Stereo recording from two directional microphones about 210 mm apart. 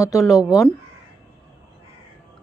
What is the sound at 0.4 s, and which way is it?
Speech, 15° left (ahead or behind).